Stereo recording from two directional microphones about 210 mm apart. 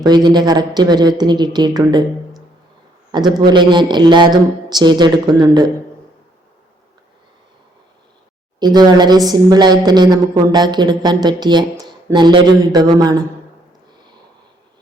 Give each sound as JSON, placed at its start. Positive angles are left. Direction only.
{"t": 0.0, "sound": "a woman's voice", "side_deg": -20}
{"t": 3.1, "sound": "a woman's voice", "side_deg": -20}
{"t": 8.5, "sound": "a woman's voice", "side_deg": -20}